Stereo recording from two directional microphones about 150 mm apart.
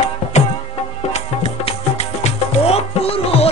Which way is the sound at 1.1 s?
45° left (ahead or behind).